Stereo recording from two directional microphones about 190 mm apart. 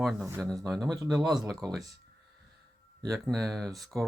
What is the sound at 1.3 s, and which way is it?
Speech, 20° right (ahead or behind).